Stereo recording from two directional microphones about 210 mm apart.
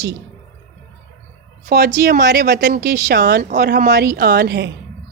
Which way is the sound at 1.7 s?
45° right (ahead or behind).